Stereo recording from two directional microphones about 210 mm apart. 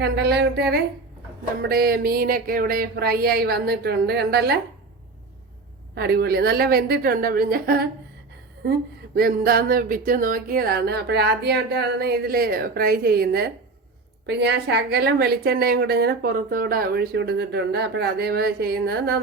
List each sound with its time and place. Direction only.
0.0 s a woman's voice: 50° right (ahead or behind)
5.9 s a woman's voice: 50° right (ahead or behind)
9.1 s a woman's voice: 45° right (ahead or behind)